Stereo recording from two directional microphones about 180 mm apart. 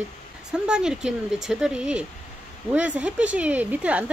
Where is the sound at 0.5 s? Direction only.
5° right (ahead or behind).